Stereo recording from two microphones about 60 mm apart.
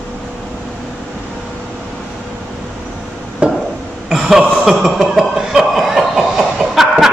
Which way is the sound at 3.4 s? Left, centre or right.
Centre.